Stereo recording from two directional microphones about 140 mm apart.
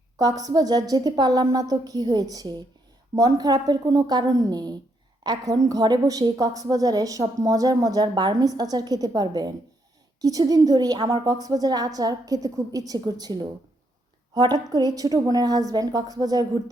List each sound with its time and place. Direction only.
0.2 s a woman's voice: 25° right (ahead or behind)